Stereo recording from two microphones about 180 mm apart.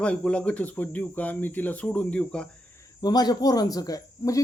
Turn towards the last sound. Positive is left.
turn(degrees=20)  # may be behind; listen again after turning